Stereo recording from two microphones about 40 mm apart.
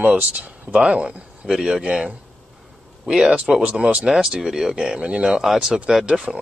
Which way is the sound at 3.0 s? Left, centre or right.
Centre.